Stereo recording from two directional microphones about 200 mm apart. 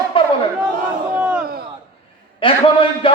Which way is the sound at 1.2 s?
5° right (ahead or behind).